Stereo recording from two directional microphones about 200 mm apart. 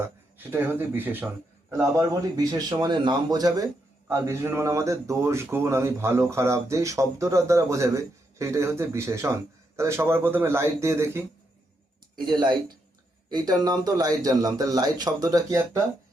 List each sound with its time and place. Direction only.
0.0 s speech: 10° right (ahead or behind)